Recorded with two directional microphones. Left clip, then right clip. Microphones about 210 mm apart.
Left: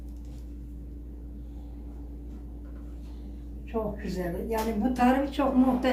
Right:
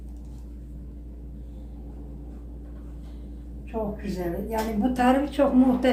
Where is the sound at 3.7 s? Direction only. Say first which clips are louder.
Right 1 dB; 15° right (ahead or behind).